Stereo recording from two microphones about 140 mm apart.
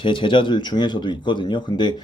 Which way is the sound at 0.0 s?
35° left (ahead or behind).